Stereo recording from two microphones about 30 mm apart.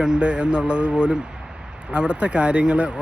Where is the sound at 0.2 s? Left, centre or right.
Right.